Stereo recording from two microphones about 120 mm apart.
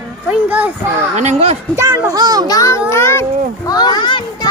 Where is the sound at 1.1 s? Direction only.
70° right (ahead or behind).